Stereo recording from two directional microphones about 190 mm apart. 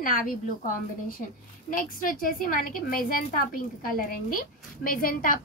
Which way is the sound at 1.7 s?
45° left (ahead or behind).